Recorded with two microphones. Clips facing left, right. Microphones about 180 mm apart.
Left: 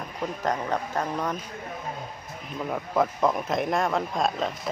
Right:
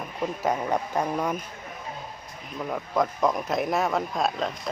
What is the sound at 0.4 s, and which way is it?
Speech, 10° right (ahead or behind).